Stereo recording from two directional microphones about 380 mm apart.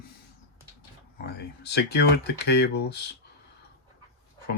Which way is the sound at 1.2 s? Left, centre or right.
Left.